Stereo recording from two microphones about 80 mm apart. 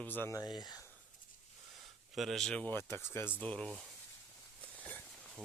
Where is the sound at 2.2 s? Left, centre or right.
Centre.